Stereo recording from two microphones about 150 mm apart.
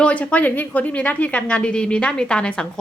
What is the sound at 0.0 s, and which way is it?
A woman's voice, 10° left (ahead or behind).